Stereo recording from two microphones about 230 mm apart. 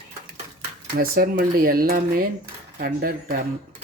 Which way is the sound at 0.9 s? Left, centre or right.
Right.